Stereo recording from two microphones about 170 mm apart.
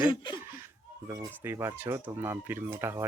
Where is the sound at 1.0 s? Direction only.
20° right (ahead or behind).